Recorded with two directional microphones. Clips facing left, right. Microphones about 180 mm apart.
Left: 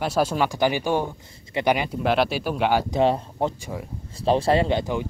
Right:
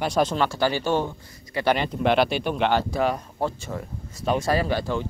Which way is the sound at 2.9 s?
25° left (ahead or behind).